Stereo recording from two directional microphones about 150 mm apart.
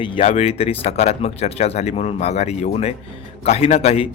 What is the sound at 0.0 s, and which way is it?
Speech, 45° left (ahead or behind).